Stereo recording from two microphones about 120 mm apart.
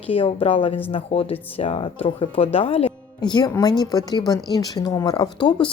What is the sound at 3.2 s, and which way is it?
Speech, 35° left (ahead or behind).